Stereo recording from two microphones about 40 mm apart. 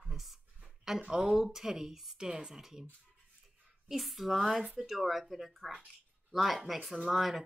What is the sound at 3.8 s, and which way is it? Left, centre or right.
Speech, centre.